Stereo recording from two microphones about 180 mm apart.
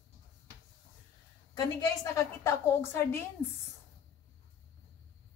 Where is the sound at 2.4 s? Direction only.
15° left (ahead or behind).